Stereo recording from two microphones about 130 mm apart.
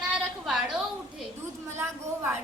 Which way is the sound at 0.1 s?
5° right (ahead or behind).